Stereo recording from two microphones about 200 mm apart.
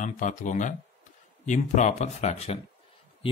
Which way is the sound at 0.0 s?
40° left (ahead or behind).